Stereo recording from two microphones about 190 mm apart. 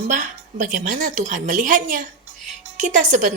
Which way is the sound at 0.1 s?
40° right (ahead or behind).